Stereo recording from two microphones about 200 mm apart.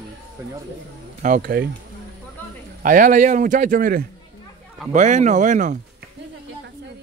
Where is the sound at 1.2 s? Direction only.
45° right (ahead or behind).